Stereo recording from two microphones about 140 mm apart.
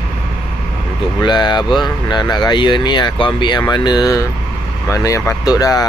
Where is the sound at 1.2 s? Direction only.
30° left (ahead or behind).